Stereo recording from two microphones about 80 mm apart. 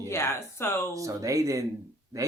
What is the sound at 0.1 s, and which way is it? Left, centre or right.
Speech, left.